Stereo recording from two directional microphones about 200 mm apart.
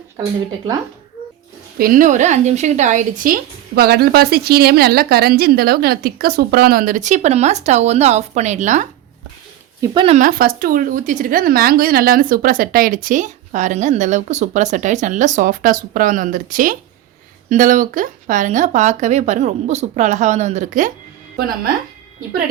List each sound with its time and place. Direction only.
1.8 s a woman's voice: 40° right (ahead or behind)
9.8 s speech: 25° right (ahead or behind)
10.2 s a woman's voice: 45° right (ahead or behind)